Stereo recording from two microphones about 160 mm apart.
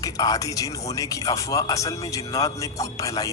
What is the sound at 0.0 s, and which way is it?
Speech, 20° left (ahead or behind).